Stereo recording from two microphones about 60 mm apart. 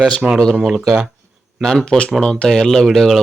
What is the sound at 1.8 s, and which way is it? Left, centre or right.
Speech, centre.